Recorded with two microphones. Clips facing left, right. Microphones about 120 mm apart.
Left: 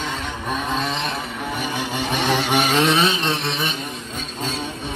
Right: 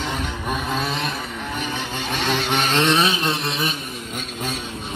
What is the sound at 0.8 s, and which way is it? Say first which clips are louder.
Vehicle: left 1 dB; centre (ahead or behind).